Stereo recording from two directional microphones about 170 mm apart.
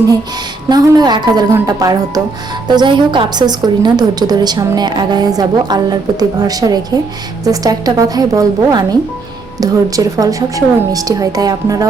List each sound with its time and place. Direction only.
0.7 s a woman's voice: 25° right (ahead or behind)